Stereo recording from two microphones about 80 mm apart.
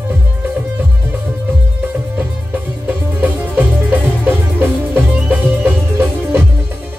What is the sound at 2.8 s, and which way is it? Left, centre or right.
Music, right.